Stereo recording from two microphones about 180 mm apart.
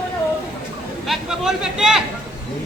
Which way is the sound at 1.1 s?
5° right (ahead or behind).